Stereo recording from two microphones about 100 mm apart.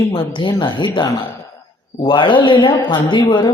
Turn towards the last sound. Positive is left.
turn(degrees=50)  # may be behind; listen again after turning